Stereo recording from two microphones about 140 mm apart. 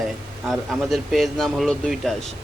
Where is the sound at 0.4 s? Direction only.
Centre (ahead or behind).